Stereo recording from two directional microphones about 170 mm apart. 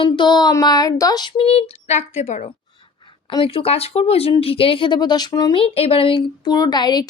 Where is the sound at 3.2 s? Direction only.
30° left (ahead or behind).